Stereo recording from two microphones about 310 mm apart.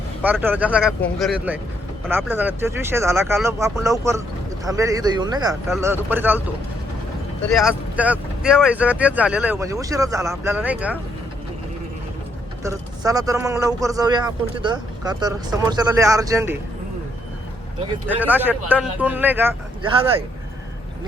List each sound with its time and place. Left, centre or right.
0.2 s speech: centre
7.5 s speech: centre
12.6 s speech: centre
18.3 s speech: centre